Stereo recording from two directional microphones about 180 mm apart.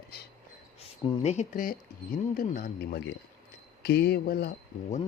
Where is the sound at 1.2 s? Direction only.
45° left (ahead or behind).